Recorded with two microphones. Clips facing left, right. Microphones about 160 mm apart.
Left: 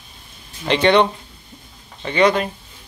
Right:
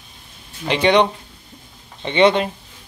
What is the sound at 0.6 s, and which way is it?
Speech, 10° right (ahead or behind).